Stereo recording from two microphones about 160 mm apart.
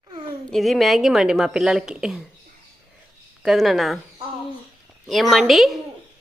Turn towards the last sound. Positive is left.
turn(degrees=0)  # may be behind; listen again after turning